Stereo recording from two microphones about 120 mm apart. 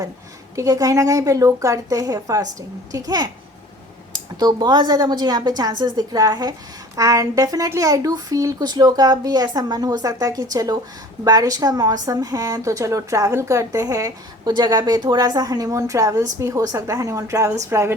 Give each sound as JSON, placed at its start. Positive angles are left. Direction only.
{"t": 0.5, "sound": "a woman's voice", "side_deg": -30}